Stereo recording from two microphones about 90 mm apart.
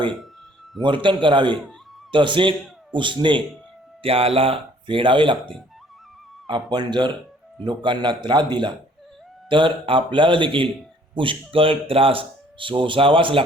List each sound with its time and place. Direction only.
0.8 s speech: 65° right (ahead or behind)
4.0 s speech: 90° right; by 13.4 s 75° right (ahead or behind)